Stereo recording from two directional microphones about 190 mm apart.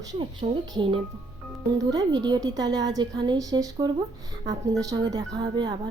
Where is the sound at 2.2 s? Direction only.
20° right (ahead or behind).